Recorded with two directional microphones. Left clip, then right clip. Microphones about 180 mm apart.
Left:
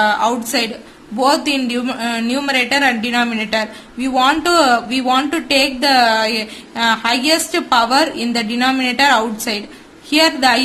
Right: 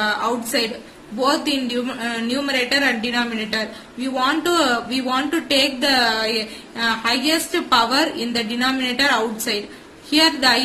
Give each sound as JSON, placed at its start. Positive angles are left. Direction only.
{"t": 0.0, "sound": "speech", "side_deg": 35}